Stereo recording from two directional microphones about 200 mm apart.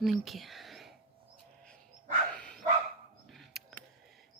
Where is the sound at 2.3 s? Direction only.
5° left (ahead or behind).